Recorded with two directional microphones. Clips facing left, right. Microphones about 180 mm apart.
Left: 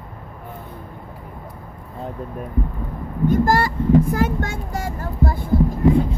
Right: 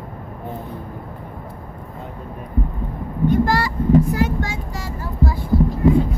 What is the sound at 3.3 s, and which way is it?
Speech, 45° left (ahead or behind).